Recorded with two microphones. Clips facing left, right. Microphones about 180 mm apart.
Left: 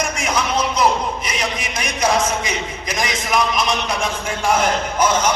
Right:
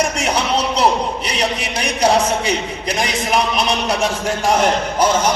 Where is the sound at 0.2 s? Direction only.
35° right (ahead or behind).